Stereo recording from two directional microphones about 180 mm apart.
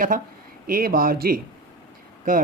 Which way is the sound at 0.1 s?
50° right (ahead or behind).